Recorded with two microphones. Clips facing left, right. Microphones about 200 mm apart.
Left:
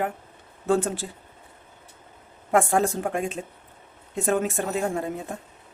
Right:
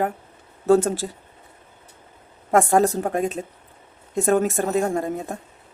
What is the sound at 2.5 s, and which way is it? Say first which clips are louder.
Speech: right 4 dB; 40° right (ahead or behind).